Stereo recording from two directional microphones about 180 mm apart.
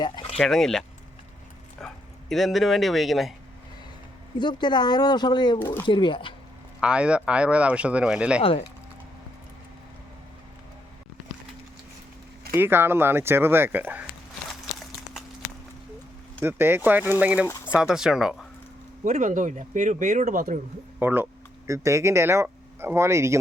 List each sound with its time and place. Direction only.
0.0 s a sound: 30° left (ahead or behind)
0.3 s speech: centre (ahead or behind)
1.8 s a sound: 5° left (ahead or behind)
2.3 s speech: centre (ahead or behind)
4.4 s speech: 25° left (ahead or behind)
5.5 s speech: 10° left (ahead or behind)
5.8 s speech: 25° left (ahead or behind)
6.7 s speech: 5° right (ahead or behind)
8.4 s speech: 35° left (ahead or behind)
12.5 s speech: 10° right (ahead or behind)
16.4 s speech: 10° right (ahead or behind)
19.0 s speech: 45° right (ahead or behind)
21.0 s speech: 10° right (ahead or behind)